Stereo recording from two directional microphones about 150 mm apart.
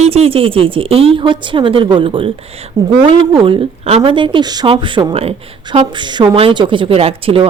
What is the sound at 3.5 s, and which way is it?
A woman's voice, 45° right (ahead or behind).